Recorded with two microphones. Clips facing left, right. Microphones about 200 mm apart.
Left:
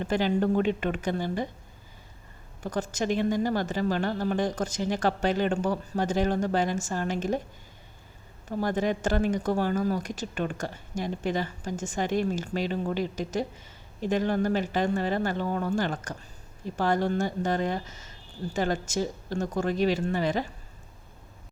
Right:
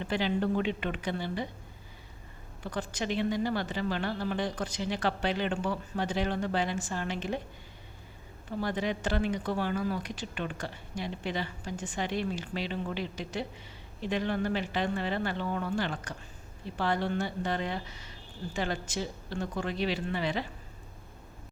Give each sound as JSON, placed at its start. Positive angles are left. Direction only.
{"t": 0.0, "sound": "a woman's voice", "side_deg": 45}
{"t": 2.6, "sound": "a woman's voice", "side_deg": 45}
{"t": 8.4, "sound": "a woman's voice", "side_deg": 45}